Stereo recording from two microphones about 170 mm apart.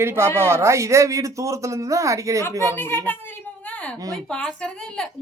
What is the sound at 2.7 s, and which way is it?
Speech, 15° left (ahead or behind).